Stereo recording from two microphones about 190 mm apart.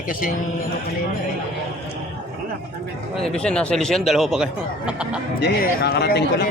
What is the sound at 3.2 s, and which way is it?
Speech, 5° left (ahead or behind).